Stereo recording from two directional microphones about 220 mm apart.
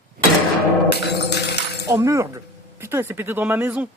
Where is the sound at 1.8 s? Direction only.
15° right (ahead or behind).